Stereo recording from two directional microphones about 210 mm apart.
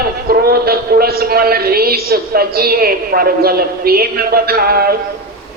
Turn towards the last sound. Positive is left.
turn(degrees=-45)  # may be behind; listen again after turning